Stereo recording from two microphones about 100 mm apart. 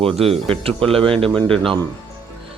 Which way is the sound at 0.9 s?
70° right (ahead or behind).